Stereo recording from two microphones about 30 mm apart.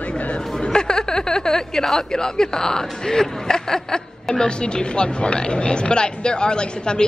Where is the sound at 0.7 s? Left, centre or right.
Left.